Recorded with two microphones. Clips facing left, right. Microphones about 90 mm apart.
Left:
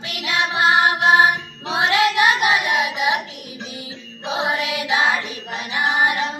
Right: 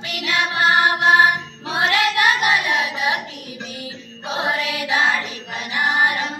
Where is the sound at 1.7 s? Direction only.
15° left (ahead or behind).